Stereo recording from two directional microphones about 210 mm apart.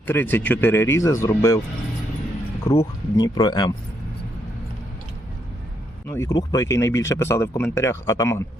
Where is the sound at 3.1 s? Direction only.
20° left (ahead or behind).